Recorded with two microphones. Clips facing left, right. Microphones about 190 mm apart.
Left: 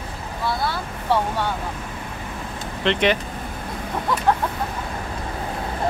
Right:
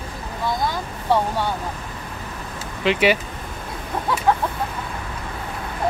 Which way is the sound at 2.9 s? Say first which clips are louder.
Right 2 dB; 5° right (ahead or behind).